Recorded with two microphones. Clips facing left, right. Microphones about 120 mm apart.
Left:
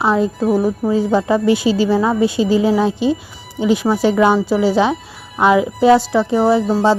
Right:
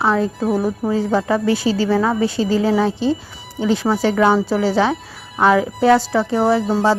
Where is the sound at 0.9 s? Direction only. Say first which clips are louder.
Left 2 dB; 15° left (ahead or behind).